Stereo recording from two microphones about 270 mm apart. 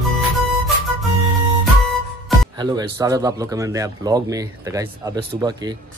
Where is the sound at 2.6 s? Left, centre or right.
Centre.